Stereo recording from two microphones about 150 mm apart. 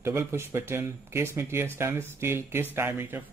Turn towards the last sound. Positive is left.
turn(degrees=-15)  # may be behind; listen again after turning